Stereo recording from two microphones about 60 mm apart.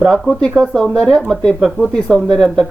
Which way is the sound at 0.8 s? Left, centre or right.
Centre.